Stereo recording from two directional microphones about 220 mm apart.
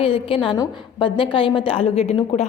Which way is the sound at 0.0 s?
25° left (ahead or behind).